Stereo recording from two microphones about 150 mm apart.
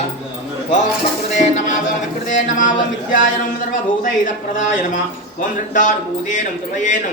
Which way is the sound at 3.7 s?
60° left (ahead or behind).